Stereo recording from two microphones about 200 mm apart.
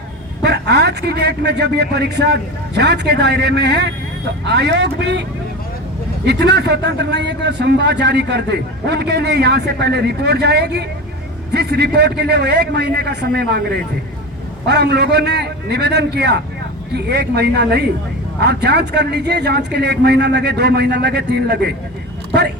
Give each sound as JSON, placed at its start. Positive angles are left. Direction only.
{"t": 0.4, "sound": "a man's voice", "side_deg": -55}
{"t": 6.2, "sound": "a man's voice", "side_deg": -55}
{"t": 22.3, "sound": "a sound", "side_deg": -55}